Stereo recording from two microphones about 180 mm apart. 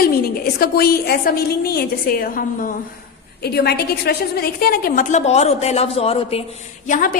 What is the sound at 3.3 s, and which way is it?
A woman's voice, 65° left (ahead or behind).